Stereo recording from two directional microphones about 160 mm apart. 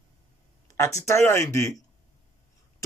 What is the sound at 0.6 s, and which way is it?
Speech, 20° left (ahead or behind).